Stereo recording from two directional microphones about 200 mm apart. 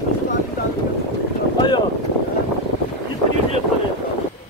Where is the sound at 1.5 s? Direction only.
20° left (ahead or behind).